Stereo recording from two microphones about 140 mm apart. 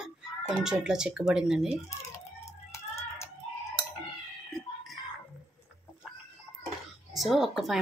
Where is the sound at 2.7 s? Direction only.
20° left (ahead or behind).